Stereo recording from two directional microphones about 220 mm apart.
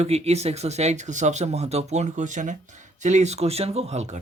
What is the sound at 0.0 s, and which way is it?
Speech, 30° right (ahead or behind).